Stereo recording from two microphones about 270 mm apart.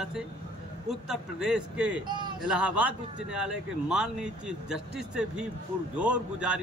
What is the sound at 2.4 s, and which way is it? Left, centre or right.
A man's voice, centre.